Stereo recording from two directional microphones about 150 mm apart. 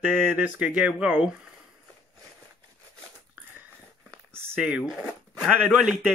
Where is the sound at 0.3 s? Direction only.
10° right (ahead or behind).